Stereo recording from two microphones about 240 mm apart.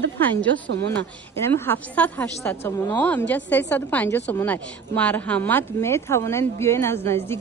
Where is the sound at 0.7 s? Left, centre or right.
Right.